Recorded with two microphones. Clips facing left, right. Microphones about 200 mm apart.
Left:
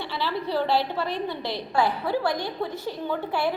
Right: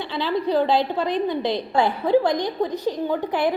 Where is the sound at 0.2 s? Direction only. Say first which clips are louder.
Right 6 dB; 20° right (ahead or behind).